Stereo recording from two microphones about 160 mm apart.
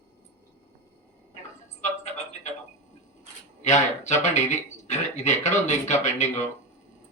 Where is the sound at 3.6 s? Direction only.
45° left (ahead or behind).